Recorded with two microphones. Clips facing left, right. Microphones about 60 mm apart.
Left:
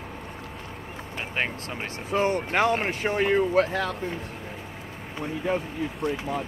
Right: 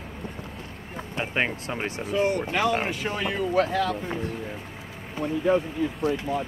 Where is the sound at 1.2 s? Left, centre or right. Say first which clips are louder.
Right 3 dB; centre.